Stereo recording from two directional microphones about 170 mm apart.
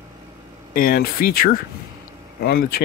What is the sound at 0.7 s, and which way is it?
Speech, 55° left (ahead or behind).